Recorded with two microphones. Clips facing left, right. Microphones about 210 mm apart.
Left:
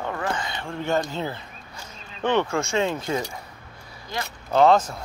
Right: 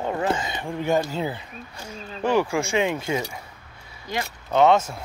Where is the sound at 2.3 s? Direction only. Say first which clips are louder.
Right 2 dB; 15° right (ahead or behind).